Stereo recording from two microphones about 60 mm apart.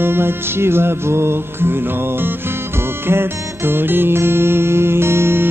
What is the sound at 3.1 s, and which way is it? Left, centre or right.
Music, right.